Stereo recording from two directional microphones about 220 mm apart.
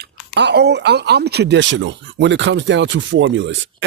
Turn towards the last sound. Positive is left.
turn(degrees=-55)  # may be behind; listen again after turning